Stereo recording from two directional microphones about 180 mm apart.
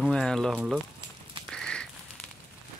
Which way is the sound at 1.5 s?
5° left (ahead or behind).